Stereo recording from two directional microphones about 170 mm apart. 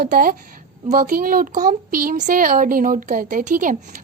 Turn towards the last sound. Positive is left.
turn(degrees=-50)  # may be behind; listen again after turning